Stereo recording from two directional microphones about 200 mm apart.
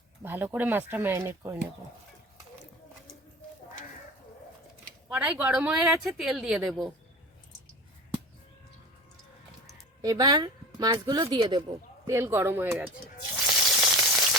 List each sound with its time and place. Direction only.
0.2 s speech: 10° right (ahead or behind)
5.0 s speech: 5° right (ahead or behind)
10.0 s speech: 20° right (ahead or behind)
13.3 s frying: centre (ahead or behind)